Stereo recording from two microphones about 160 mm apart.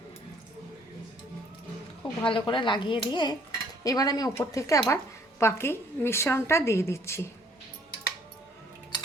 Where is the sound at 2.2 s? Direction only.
30° left (ahead or behind).